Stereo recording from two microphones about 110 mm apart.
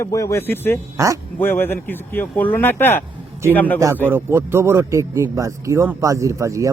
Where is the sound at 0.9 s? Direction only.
30° right (ahead or behind).